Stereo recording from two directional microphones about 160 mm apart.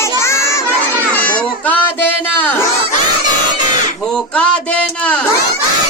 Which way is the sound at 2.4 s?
15° left (ahead or behind).